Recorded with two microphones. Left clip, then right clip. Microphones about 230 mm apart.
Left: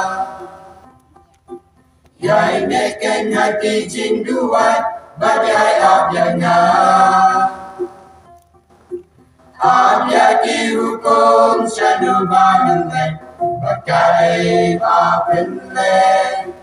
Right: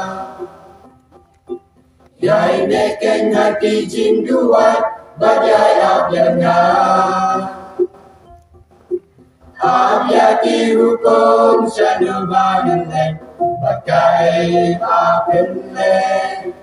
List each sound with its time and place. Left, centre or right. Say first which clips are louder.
2.2 s a capella: right 1 dB; left
9.6 s a capella: left 1 dB; left